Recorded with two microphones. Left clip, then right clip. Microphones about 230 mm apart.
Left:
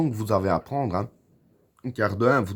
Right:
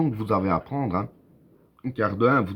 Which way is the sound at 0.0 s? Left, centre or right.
Left.